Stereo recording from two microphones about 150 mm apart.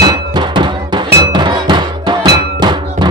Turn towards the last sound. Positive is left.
turn(degrees=-30)  # may be behind; listen again after turning